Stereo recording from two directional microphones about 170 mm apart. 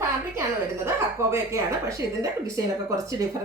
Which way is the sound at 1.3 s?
15° right (ahead or behind).